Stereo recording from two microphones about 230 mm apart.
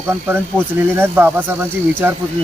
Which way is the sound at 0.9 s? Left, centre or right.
Centre.